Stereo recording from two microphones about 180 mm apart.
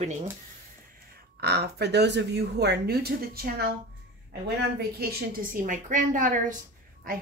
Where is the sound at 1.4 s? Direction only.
65° right (ahead or behind).